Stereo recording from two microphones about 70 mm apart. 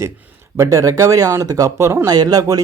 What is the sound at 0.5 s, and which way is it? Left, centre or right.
Speech, right.